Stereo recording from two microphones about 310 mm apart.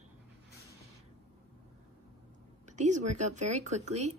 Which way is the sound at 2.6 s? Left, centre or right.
Right.